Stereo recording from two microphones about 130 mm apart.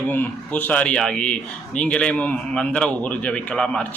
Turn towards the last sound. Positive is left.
turn(degrees=5)  # may be behind; listen again after turning